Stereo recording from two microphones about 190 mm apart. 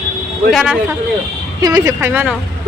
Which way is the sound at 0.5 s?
5° right (ahead or behind).